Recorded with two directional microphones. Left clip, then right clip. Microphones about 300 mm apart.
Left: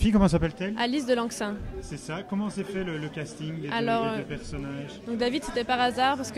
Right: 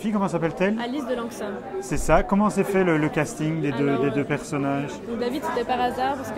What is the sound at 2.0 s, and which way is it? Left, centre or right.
Speech, centre.